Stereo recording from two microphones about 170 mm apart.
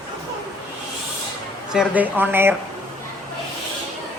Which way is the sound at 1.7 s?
10° right (ahead or behind).